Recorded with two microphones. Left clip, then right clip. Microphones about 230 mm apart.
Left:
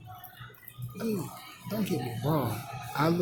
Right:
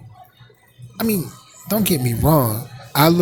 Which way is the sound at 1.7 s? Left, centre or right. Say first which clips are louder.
Right 12 dB; right.